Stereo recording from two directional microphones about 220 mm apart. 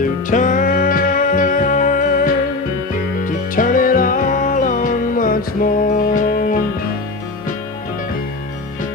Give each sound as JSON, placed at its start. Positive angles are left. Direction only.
{"t": 0.0, "sound": "music", "side_deg": 35}